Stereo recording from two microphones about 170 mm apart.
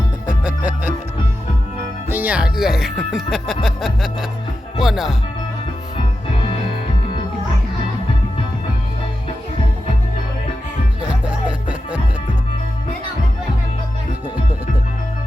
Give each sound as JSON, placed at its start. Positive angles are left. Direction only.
{"t": 0.4, "sound": "music", "side_deg": -5}
{"t": 2.0, "sound": "speech", "side_deg": -10}
{"t": 11.1, "sound": "music", "side_deg": -5}